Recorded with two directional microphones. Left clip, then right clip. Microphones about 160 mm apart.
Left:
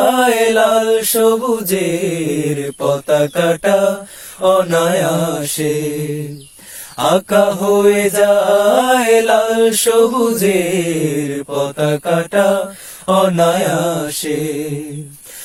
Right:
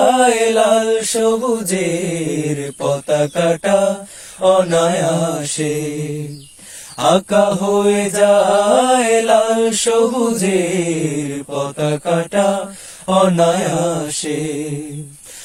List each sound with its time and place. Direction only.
0.0 s mantra: 35° left (ahead or behind)